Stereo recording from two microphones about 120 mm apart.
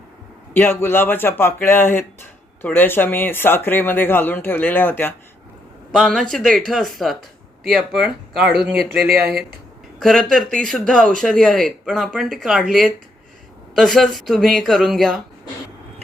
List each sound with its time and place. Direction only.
0.5 s speech: 20° left (ahead or behind)
5.9 s speech: 5° left (ahead or behind)